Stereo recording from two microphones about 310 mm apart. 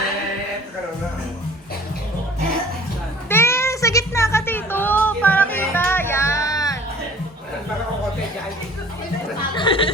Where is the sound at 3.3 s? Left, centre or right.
Centre.